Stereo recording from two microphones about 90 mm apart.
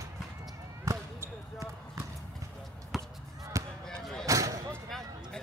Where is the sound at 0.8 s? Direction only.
40° right (ahead or behind).